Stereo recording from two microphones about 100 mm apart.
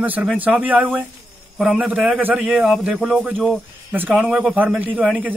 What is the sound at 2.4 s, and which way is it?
Speech, centre (ahead or behind).